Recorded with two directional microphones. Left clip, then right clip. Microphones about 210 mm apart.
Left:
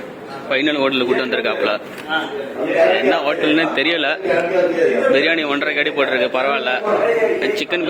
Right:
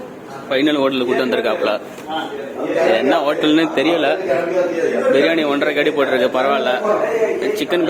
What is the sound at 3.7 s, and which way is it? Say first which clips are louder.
A man's voice: right 2 dB; 5° left (ahead or behind).